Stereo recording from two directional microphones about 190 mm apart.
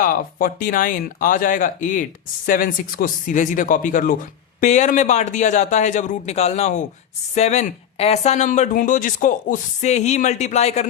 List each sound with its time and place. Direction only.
0.0 s speech: 45° left (ahead or behind)